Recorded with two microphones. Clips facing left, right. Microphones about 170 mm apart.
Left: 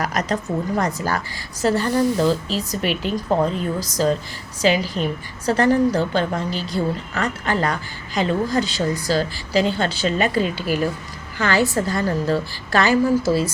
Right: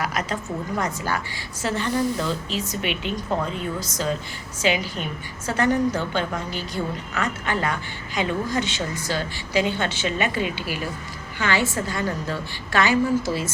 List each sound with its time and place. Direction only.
0.0 s a woman's voice: 40° left (ahead or behind)